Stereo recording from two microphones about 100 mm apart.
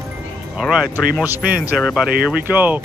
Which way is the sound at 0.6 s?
5° right (ahead or behind).